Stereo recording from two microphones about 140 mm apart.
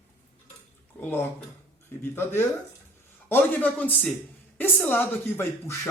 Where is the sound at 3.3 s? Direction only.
15° left (ahead or behind).